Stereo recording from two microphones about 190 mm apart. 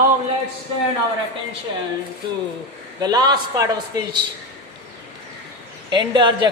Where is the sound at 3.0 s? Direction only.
20° right (ahead or behind).